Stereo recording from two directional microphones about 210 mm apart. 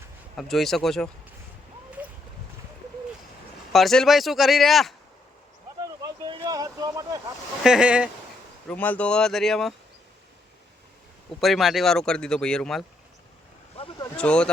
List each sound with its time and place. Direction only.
0.3 s speech: centre (ahead or behind)
3.7 s speech: centre (ahead or behind)
5.8 s boat: 20° right (ahead or behind)
7.6 s speech: 5° right (ahead or behind)
8.6 s speech: 10° left (ahead or behind)
11.3 s speech: centre (ahead or behind)
13.7 s vehicle: 25° left (ahead or behind)
14.2 s speech: 5° left (ahead or behind)